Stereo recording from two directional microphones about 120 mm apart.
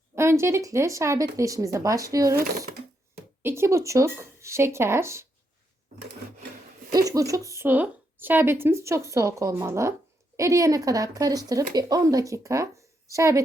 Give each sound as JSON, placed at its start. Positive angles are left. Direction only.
{"t": 0.2, "sound": "speech", "side_deg": -20}
{"t": 6.9, "sound": "speech", "side_deg": -30}